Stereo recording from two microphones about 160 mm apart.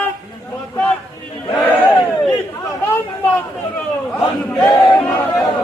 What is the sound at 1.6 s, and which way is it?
Battle cry, 10° left (ahead or behind).